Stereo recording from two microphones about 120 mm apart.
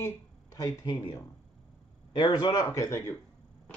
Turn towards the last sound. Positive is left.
turn(degrees=25)  # may be behind; listen again after turning